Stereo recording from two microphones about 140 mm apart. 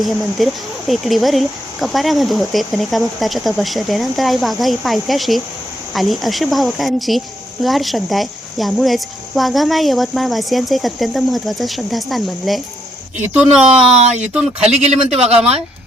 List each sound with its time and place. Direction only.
0.0 s speech: centre (ahead or behind)
14.0 s a man's voice: 50° right (ahead or behind)